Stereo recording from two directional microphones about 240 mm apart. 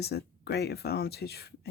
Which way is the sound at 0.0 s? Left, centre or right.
Left.